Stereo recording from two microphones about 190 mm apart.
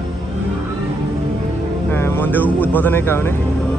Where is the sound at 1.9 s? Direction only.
10° left (ahead or behind).